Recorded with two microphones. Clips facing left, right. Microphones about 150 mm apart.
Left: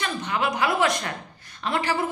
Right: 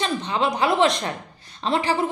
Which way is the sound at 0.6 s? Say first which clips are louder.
Right 4 dB; 25° right (ahead or behind).